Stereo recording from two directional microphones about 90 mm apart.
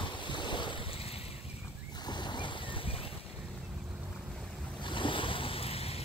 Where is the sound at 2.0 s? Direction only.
55° left (ahead or behind).